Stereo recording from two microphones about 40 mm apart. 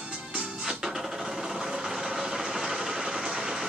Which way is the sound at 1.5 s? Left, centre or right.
Centre.